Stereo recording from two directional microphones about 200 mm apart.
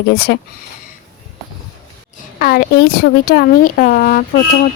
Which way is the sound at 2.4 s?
50° left (ahead or behind).